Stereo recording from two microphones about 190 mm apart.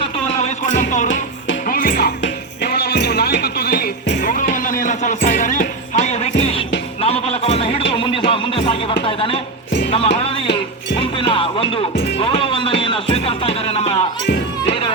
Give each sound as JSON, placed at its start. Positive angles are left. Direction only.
{"t": 0.3, "sound": "music", "side_deg": 35}
{"t": 1.9, "sound": "music", "side_deg": 60}
{"t": 9.0, "sound": "a sound", "side_deg": 30}
{"t": 9.9, "sound": "music", "side_deg": 30}
{"t": 11.9, "sound": "music", "side_deg": 70}
{"t": 12.2, "sound": "music", "side_deg": 25}